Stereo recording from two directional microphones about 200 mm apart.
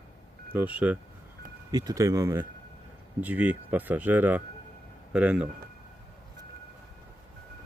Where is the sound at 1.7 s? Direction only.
15° right (ahead or behind).